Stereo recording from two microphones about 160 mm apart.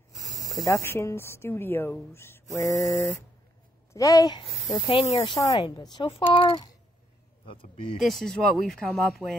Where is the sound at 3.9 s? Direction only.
20° left (ahead or behind).